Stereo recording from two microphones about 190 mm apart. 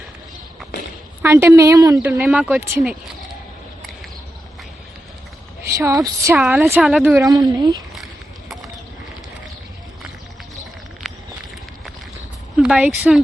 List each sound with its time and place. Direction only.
1.2 s speech: 10° right (ahead or behind)
5.7 s speech: 15° right (ahead or behind)
6.3 s speech: 5° right (ahead or behind)
6.6 s speech: 15° right (ahead or behind)
6.8 s speech: centre (ahead or behind)
7.2 s speech: 20° right (ahead or behind)
7.9 s a sound: centre (ahead or behind)
11.1 s a sound: centre (ahead or behind)
12.5 s a sound: 5° right (ahead or behind)